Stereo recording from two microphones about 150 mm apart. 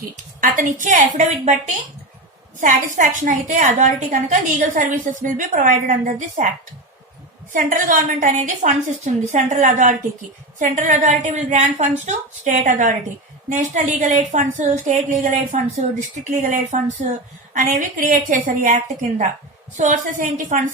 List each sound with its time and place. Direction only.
0.4 s a woman's voice: 60° right (ahead or behind)
2.6 s a woman's voice: 60° right (ahead or behind)
7.5 s a woman's voice: 60° right (ahead or behind)